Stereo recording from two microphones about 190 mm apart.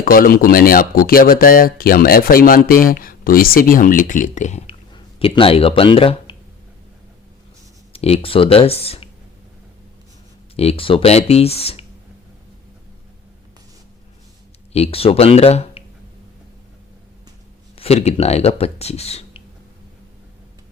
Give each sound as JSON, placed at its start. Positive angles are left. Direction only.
{"t": 0.0, "sound": "speech", "side_deg": 50}
{"t": 4.9, "sound": "speech", "side_deg": 25}
{"t": 7.9, "sound": "speech", "side_deg": 30}
{"t": 10.5, "sound": "speech", "side_deg": 30}
{"t": 14.7, "sound": "speech", "side_deg": 30}
{"t": 17.7, "sound": "speech", "side_deg": 35}